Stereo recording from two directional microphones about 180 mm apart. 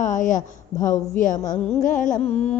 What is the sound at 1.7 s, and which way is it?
Mantra, 45° left (ahead or behind).